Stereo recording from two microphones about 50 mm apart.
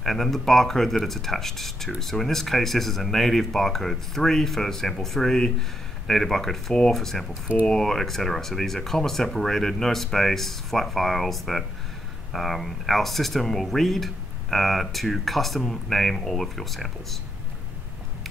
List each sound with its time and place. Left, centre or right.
0.0 s speech: centre